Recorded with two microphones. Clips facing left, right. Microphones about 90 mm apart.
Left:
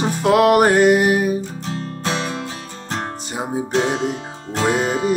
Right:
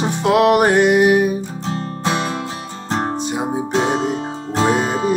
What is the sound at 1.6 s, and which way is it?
Music, 20° right (ahead or behind).